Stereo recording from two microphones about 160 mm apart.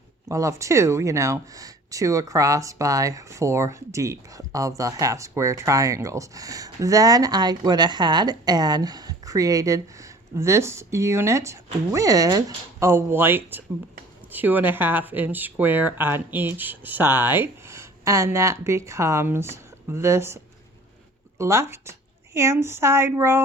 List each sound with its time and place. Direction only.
0.3 s a woman's voice: 20° right (ahead or behind)